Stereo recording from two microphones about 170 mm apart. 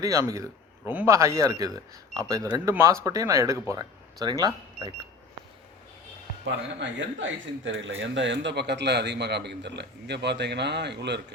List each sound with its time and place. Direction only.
0.0 s speech: 20° right (ahead or behind)
6.4 s speech: 90° right